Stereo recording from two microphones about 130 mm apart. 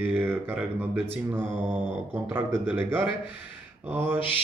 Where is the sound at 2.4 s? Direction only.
15° right (ahead or behind).